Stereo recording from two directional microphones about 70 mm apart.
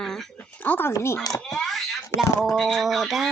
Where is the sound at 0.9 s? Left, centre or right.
Left.